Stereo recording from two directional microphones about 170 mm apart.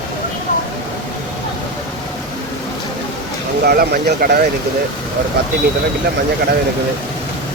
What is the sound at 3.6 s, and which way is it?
Speech, 65° right (ahead or behind).